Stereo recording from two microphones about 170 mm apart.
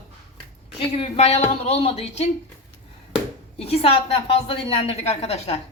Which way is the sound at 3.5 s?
35° left (ahead or behind).